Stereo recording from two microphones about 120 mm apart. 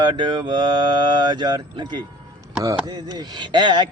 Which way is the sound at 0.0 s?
40° right (ahead or behind).